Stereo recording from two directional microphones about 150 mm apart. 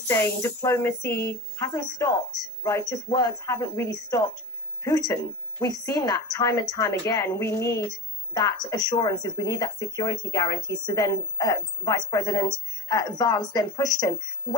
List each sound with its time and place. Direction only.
0.1 s speech: 20° left (ahead or behind)